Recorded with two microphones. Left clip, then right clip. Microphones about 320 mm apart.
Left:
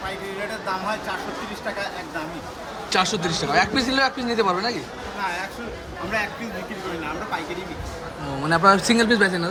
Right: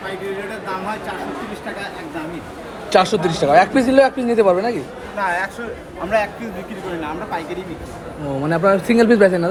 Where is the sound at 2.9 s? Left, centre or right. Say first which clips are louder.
Right 7 dB; centre.